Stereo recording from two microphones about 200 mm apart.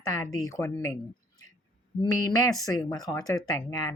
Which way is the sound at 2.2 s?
20° left (ahead or behind).